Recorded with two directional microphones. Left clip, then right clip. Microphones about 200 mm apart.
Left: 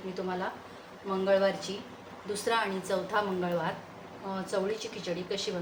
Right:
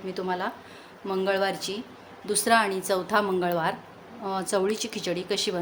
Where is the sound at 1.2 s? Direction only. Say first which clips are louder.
Even; 55° right (ahead or behind).